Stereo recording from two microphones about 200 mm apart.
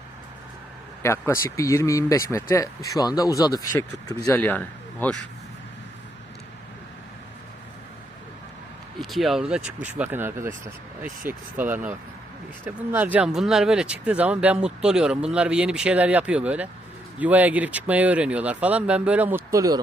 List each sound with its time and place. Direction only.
1.0 s speech: 15° left (ahead or behind)
9.0 s speech: centre (ahead or behind); by 19.8 s 15° right (ahead or behind)